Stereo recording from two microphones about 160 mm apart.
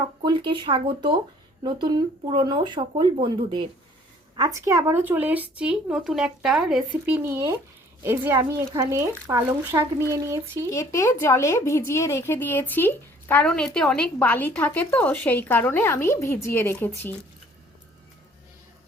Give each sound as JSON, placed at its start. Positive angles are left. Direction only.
{"t": 0.2, "sound": "speech", "side_deg": -30}
{"t": 10.7, "sound": "a woman's voice", "side_deg": 20}